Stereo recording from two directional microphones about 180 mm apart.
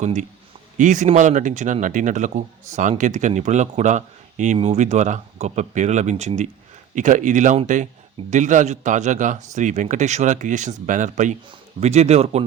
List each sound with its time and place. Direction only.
0.0 s a man's voice: 40° right (ahead or behind)